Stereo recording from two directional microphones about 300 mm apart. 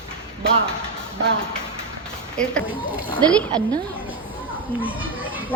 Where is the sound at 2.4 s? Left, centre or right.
Centre.